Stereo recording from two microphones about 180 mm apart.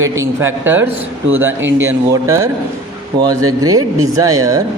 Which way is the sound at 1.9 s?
15° right (ahead or behind).